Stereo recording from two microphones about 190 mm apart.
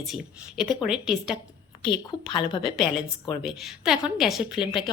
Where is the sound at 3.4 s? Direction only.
Centre (ahead or behind).